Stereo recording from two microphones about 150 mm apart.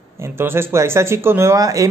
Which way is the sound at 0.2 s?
15° right (ahead or behind).